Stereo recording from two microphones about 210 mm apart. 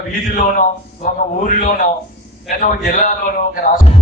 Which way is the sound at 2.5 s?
45° left (ahead or behind).